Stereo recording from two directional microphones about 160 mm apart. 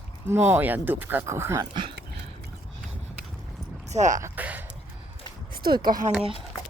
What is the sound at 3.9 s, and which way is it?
Speech, 50° right (ahead or behind).